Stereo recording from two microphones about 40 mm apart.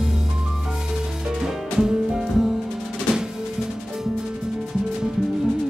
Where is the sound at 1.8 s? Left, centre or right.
Centre.